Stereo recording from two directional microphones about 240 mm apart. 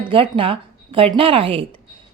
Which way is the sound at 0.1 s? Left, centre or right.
Right.